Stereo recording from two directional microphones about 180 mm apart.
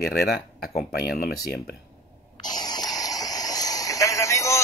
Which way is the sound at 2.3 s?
20° left (ahead or behind).